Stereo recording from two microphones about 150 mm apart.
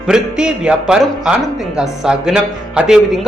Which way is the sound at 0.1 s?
5° right (ahead or behind).